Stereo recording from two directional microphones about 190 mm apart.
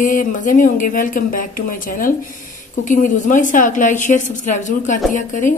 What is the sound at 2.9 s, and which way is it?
A woman's voice, 45° left (ahead or behind).